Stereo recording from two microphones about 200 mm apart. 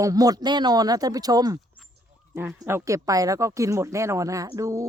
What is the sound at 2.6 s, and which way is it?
Speech, 15° right (ahead or behind).